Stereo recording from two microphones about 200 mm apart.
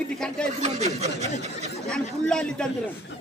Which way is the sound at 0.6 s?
35° right (ahead or behind).